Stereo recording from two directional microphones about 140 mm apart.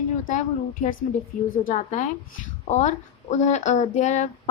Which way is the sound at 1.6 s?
65° left (ahead or behind).